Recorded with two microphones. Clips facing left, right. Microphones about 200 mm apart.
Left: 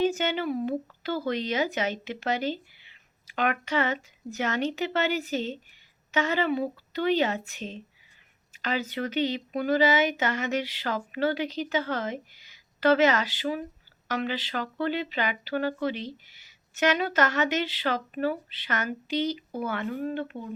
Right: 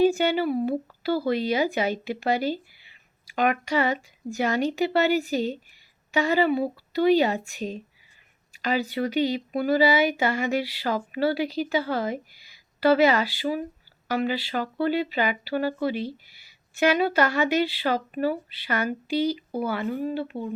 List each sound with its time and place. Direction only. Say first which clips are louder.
0.1 s speech: right 5 dB; 10° right (ahead or behind)
8.7 s speech: right 4 dB; 40° right (ahead or behind)
9.0 s speech: right 2 dB; 10° right (ahead or behind)